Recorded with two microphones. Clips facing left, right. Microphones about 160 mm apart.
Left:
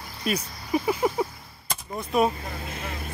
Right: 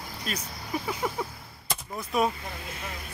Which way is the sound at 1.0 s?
15° left (ahead or behind).